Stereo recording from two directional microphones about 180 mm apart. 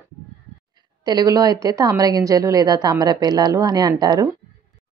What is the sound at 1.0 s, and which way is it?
Speech, 20° right (ahead or behind).